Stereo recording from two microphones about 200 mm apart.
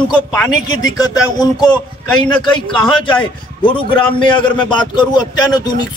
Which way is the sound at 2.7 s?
25° left (ahead or behind).